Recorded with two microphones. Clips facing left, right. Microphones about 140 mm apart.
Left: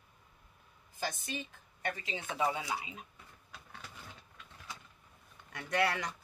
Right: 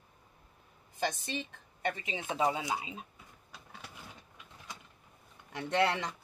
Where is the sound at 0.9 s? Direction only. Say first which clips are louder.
Right 4 dB; 25° right (ahead or behind).